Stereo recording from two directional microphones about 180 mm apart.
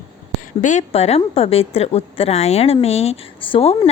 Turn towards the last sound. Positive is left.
turn(degrees=30)  # may be behind; listen again after turning